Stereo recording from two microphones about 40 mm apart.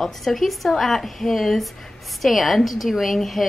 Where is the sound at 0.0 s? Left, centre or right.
Centre.